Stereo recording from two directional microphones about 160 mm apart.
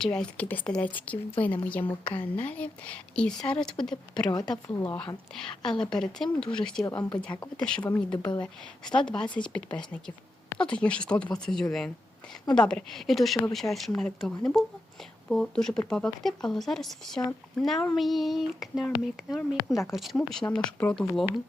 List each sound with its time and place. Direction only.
0.0 s speech: 5° left (ahead or behind)
4.3 s speech: 25° left (ahead or behind)
4.8 s speech: 10° left (ahead or behind)
6.8 s speech: 20° left (ahead or behind)
7.1 s speech: 5° left (ahead or behind)